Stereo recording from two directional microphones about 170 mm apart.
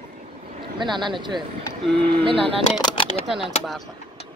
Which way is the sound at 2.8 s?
30° left (ahead or behind).